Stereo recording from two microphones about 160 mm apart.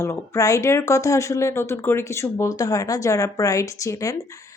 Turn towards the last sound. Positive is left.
turn(degrees=20)  # may be behind; listen again after turning